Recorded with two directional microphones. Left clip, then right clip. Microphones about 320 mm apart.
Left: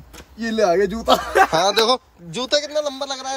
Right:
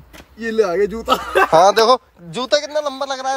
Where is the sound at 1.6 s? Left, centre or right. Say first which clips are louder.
Right 5 dB; centre.